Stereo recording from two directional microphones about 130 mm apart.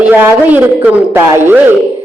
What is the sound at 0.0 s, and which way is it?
A man's voice, 10° right (ahead or behind).